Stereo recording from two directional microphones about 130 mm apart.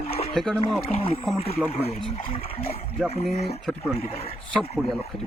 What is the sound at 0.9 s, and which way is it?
Speech, 50° left (ahead or behind).